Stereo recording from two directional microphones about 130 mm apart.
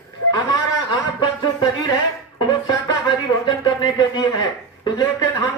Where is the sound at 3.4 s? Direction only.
35° left (ahead or behind).